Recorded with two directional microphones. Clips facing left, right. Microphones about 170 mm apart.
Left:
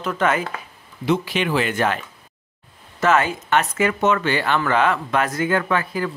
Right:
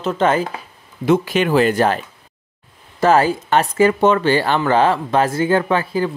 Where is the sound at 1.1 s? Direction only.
45° right (ahead or behind).